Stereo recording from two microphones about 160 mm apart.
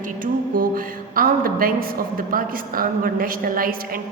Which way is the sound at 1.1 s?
60° right (ahead or behind).